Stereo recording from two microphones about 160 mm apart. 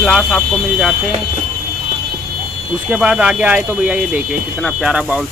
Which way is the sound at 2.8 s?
5° right (ahead or behind).